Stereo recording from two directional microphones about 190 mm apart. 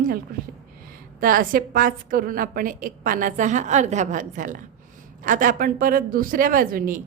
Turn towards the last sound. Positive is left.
turn(degrees=-45)  # may be behind; listen again after turning